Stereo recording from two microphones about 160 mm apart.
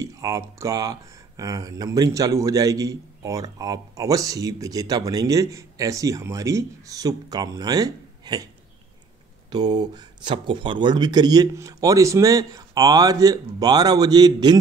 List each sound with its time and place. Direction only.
0.0 s speech: 20° right (ahead or behind)
9.5 s speech: 25° right (ahead or behind)